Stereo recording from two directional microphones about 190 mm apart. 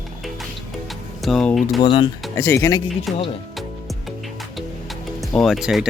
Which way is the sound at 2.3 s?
15° left (ahead or behind).